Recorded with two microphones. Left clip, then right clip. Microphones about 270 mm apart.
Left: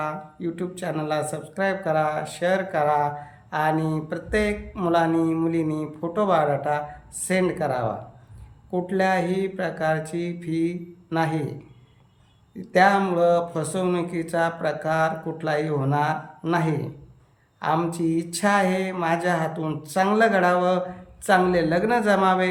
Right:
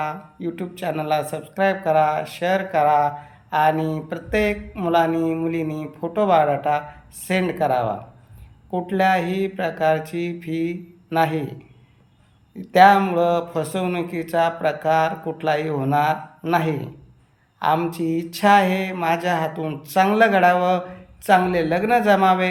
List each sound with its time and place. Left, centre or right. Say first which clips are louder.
0.0 s speech: right 2 dB; centre
12.6 s speech: right 5 dB; centre